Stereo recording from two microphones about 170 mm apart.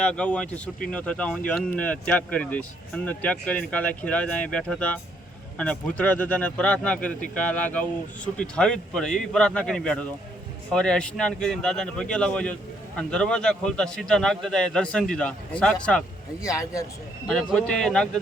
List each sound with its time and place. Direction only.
0.0 s a man's voice: 5° left (ahead or behind)
16.4 s speech: 20° left (ahead or behind)
17.5 s a man's voice: 5° left (ahead or behind)